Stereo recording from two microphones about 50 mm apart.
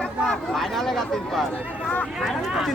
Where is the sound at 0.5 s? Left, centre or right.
Centre.